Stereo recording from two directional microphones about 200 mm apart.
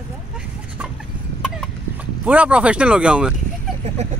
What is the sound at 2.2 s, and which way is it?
Speech, 5° right (ahead or behind).